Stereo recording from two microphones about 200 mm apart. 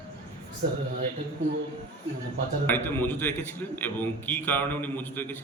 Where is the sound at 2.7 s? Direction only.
10° left (ahead or behind).